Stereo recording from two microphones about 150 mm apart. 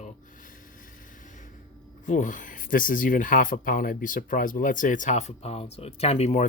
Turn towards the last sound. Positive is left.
turn(degrees=45)  # may be behind; listen again after turning